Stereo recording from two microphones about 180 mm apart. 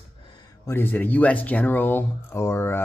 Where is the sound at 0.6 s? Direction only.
10° left (ahead or behind).